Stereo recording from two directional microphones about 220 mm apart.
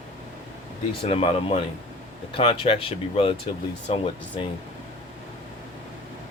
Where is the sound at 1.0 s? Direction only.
25° left (ahead or behind).